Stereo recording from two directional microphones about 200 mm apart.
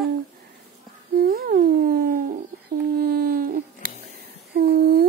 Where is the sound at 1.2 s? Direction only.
50° right (ahead or behind).